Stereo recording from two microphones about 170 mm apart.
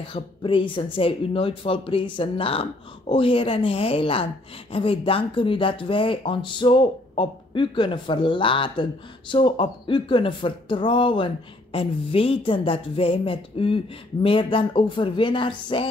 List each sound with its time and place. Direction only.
0.1 s speech: 30° left (ahead or behind)